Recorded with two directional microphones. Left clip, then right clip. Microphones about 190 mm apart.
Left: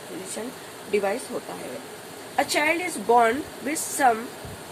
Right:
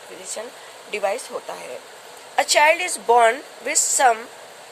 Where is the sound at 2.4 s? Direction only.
50° right (ahead or behind).